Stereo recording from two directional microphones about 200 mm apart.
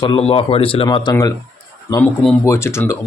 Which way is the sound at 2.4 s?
15° left (ahead or behind).